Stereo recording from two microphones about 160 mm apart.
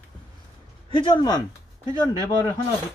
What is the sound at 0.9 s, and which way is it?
Speech, 30° left (ahead or behind).